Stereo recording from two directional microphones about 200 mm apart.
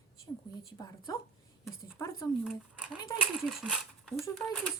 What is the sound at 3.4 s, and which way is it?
Speech, 5° right (ahead or behind).